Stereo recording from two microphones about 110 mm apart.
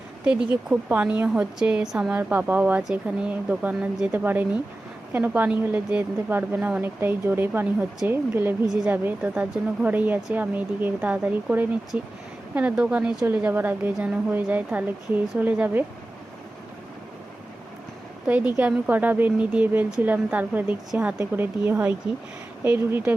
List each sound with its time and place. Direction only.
0.7 s a woman's voice: 15° right (ahead or behind)
18.3 s a woman's voice: 15° right (ahead or behind)